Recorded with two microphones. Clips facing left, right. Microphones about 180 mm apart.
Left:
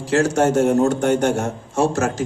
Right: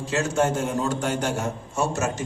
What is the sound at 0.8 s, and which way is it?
Speech, 60° left (ahead or behind).